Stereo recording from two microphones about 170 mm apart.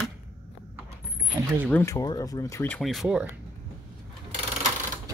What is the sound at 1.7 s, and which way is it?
Speech, 15° left (ahead or behind).